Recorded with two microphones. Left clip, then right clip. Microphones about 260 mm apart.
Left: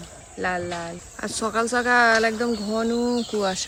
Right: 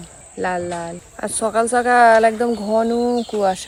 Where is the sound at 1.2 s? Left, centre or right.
Centre.